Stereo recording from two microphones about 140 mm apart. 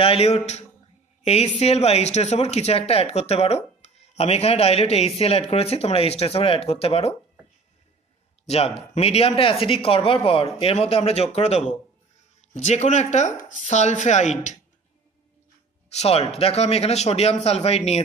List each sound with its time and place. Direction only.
0.0 s a woman's voice: 45° left (ahead or behind)
8.5 s speech: 45° left (ahead or behind)
15.9 s speech: 50° left (ahead or behind)